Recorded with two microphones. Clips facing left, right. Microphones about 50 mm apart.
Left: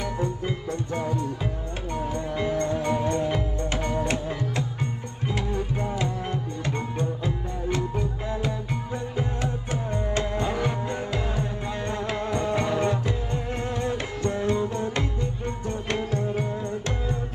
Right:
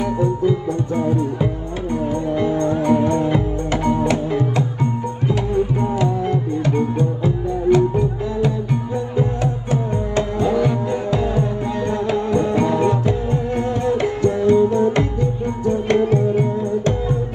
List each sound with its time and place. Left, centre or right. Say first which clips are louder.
1.0 s music: right 9 dB; right
9.1 s music: right 9 dB; right